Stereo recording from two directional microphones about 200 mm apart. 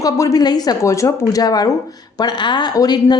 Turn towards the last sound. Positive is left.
turn(degrees=20)  # may be behind; listen again after turning